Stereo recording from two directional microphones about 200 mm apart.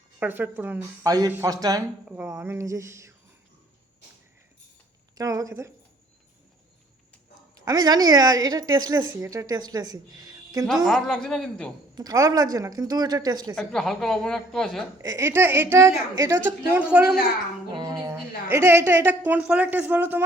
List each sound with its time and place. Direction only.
0.2 s a woman's voice: 10° right (ahead or behind)
5.1 s a woman's voice: 15° right (ahead or behind)
7.5 s a woman's voice: 20° right (ahead or behind)
10.8 s speech: centre (ahead or behind)
11.9 s a woman's voice: 15° right (ahead or behind)
13.6 s speech: centre (ahead or behind)
14.9 s a woman's voice: 15° right (ahead or behind)
17.7 s a woman's voice: 20° right (ahead or behind)